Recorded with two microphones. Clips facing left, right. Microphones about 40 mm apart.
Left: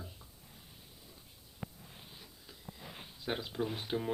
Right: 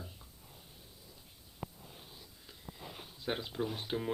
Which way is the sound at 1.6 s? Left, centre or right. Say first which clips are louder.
Right 1 dB; centre.